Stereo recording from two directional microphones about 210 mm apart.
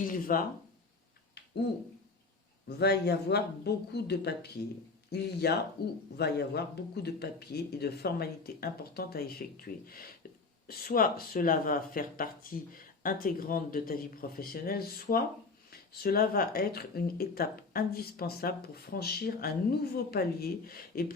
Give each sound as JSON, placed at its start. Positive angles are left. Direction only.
{"t": 0.0, "sound": "speech", "side_deg": 40}
{"t": 2.6, "sound": "speech", "side_deg": 50}
{"t": 10.7, "sound": "speech", "side_deg": 45}